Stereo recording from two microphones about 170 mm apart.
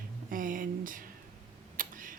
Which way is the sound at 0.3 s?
55° right (ahead or behind).